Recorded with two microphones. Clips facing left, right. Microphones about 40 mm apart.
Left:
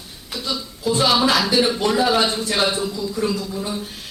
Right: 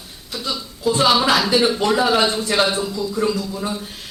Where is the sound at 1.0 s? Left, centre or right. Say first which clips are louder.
Right 1 dB; centre.